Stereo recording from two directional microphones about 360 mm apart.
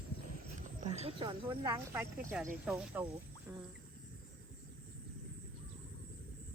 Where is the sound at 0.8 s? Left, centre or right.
Centre.